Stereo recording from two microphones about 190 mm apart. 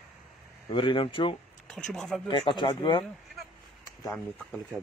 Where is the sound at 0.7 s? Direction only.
25° left (ahead or behind).